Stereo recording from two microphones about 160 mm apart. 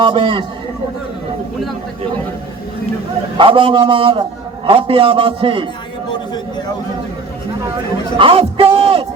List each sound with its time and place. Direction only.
0.0 s a man's voice: 30° right (ahead or behind)
3.3 s a man's voice: 35° right (ahead or behind)
8.2 s a man's voice: 35° right (ahead or behind)